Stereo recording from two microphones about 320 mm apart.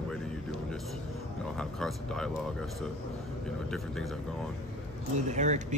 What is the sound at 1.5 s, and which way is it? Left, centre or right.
Speech, centre.